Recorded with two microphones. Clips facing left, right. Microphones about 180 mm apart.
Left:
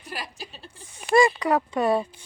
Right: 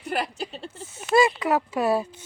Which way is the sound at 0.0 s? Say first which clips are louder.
Right 8 dB; 65° right (ahead or behind).